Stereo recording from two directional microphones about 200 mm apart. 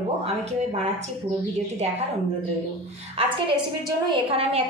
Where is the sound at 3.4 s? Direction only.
25° right (ahead or behind).